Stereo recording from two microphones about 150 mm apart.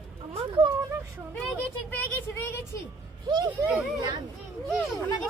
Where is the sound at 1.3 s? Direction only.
5° left (ahead or behind).